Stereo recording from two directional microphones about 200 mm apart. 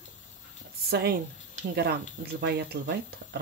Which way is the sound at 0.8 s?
55° right (ahead or behind).